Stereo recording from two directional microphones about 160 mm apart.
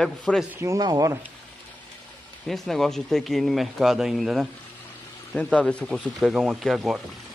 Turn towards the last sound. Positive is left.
turn(degrees=0)  # may be behind; listen again after turning